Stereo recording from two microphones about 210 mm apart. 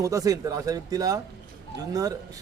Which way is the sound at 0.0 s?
15° right (ahead or behind).